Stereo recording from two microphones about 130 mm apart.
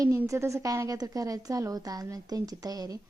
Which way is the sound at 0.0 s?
25° right (ahead or behind).